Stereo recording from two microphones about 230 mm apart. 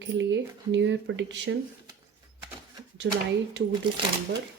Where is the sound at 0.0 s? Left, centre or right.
Right.